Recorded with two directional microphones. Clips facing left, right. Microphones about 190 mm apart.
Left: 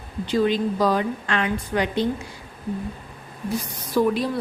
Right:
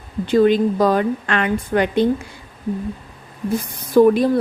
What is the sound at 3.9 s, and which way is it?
Speech, 50° right (ahead or behind).